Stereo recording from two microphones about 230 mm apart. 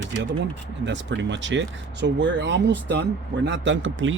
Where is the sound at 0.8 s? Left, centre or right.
Right.